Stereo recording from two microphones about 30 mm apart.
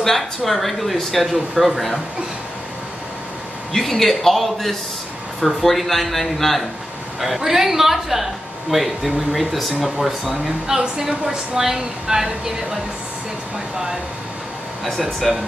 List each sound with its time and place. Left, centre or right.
0.0 s a woman's voice: centre
3.7 s speech: centre
7.2 s a woman's voice: centre
15.3 s speech: centre